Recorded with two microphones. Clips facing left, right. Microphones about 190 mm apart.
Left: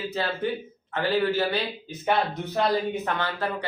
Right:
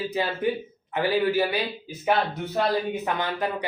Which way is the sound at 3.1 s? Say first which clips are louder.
Right 1 dB; 15° right (ahead or behind).